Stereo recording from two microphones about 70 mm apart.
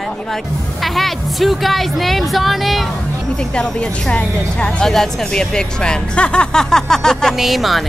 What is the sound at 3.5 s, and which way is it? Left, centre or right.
Speech, centre.